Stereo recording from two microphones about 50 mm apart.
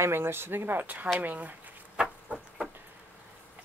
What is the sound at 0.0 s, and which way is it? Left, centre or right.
Speech, right.